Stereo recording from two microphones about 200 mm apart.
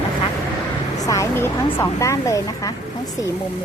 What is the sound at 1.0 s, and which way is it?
Speech, 15° left (ahead or behind).